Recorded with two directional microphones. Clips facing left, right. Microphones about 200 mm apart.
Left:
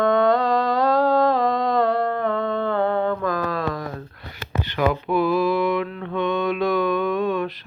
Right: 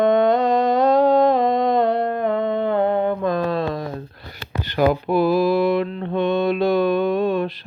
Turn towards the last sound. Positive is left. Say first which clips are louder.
# right 3 dB
turn(degrees=-30)  # may be behind; listen again after turning